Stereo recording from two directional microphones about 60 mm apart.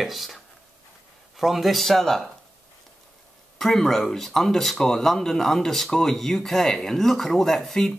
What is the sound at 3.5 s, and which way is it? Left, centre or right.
Speech, centre.